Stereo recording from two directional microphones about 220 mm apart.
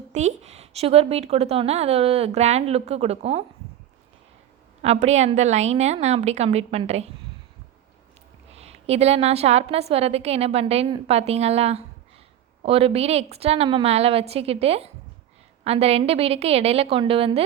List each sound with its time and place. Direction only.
0.1 s a woman's voice: 30° right (ahead or behind)
4.8 s a woman's voice: 30° right (ahead or behind)
8.5 s a woman's voice: 30° right (ahead or behind)